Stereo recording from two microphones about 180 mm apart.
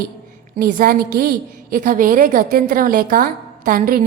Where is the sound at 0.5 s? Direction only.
50° right (ahead or behind).